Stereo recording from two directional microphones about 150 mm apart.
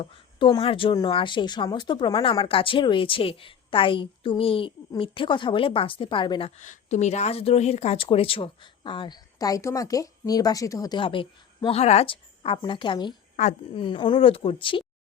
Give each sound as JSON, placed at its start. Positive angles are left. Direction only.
{"t": 0.0, "sound": "a woman's voice", "side_deg": 30}
{"t": 6.6, "sound": "a woman's voice", "side_deg": 55}